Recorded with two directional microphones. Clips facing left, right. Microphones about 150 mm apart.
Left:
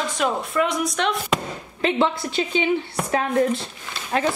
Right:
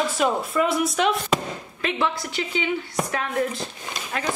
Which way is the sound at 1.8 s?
25° left (ahead or behind).